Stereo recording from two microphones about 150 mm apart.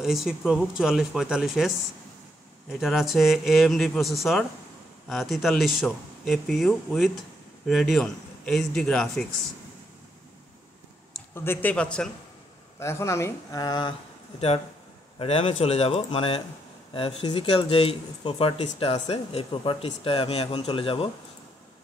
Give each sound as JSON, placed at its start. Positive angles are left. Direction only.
{"t": 0.0, "sound": "speech", "side_deg": 0}
{"t": 2.7, "sound": "speech", "side_deg": 0}
{"t": 11.3, "sound": "speech", "side_deg": 15}
{"t": 12.7, "sound": "speech", "side_deg": 20}
{"t": 15.1, "sound": "speech", "side_deg": 40}